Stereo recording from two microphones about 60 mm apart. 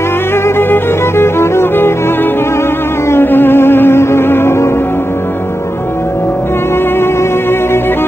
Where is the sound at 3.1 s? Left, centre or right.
Left.